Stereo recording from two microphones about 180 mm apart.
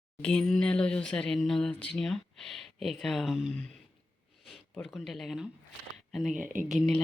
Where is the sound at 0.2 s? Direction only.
5° left (ahead or behind).